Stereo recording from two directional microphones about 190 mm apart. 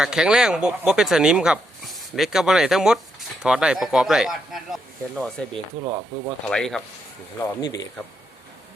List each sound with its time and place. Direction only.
0.0 s speech: 5° right (ahead or behind)
5.7 s speech: 35° right (ahead or behind)
6.4 s speech: 5° left (ahead or behind)
7.3 s speech: 20° left (ahead or behind)